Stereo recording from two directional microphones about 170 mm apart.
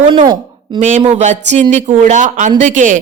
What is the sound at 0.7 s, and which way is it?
A woman's voice, 45° right (ahead or behind).